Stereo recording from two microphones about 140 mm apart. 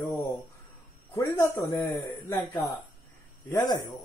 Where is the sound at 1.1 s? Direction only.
20° left (ahead or behind).